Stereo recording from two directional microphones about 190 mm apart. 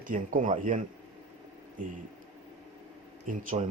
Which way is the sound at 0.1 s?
40° right (ahead or behind).